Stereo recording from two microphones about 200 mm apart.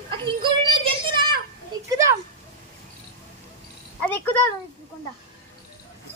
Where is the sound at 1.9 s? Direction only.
15° right (ahead or behind).